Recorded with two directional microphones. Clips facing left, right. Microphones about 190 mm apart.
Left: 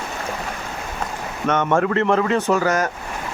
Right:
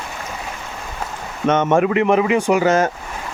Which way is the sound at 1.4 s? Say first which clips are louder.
Right 3 dB; 20° right (ahead or behind).